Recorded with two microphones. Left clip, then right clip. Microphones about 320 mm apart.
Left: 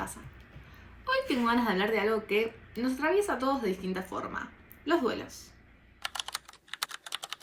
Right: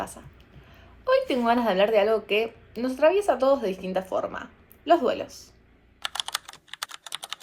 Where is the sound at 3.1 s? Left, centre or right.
Centre.